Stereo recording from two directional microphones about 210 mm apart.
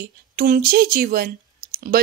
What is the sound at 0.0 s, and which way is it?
A woman's voice, 45° right (ahead or behind).